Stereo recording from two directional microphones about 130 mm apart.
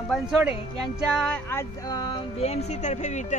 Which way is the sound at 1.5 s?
25° left (ahead or behind).